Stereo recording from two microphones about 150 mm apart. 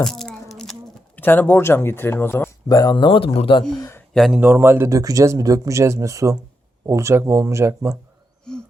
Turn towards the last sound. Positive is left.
turn(degrees=-15)  # may be behind; listen again after turning